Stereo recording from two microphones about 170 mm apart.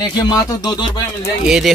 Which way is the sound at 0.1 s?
25° left (ahead or behind).